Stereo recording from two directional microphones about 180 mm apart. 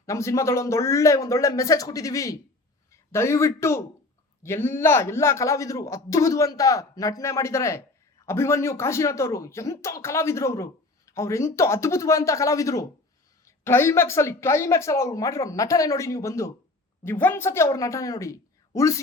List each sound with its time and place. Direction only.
0.0 s a man's voice: 15° left (ahead or behind)